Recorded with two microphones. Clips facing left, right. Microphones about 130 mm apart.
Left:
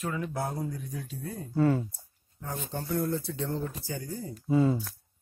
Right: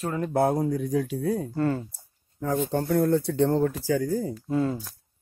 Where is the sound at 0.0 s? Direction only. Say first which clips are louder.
Right 4 dB; 40° right (ahead or behind).